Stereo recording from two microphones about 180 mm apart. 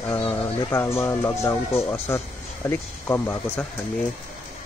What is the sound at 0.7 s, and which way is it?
Speech, 15° left (ahead or behind).